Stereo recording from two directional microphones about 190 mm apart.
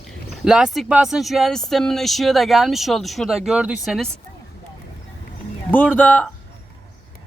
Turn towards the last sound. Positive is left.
turn(degrees=10)  # may be behind; listen again after turning